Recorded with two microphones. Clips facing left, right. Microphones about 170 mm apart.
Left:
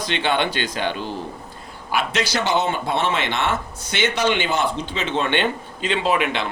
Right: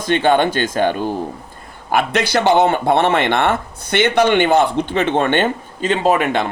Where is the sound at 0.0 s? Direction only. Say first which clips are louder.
Right 7 dB; 45° right (ahead or behind).